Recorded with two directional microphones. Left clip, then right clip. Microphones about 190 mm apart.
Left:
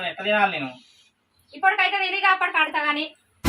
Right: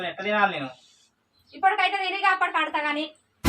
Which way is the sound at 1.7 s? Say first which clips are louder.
Left 2 dB; 5° left (ahead or behind).